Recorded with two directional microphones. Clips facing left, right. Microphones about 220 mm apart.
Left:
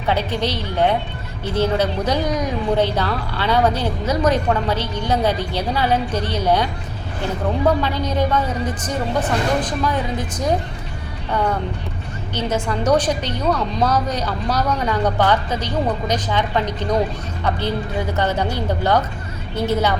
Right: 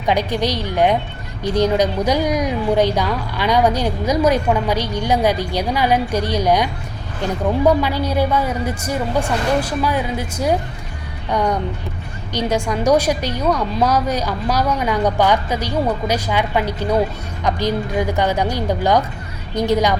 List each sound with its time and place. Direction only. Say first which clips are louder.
0.0 s speech: right 2 dB; 15° right (ahead or behind)
7.8 s speech: right 2 dB; 10° right (ahead or behind)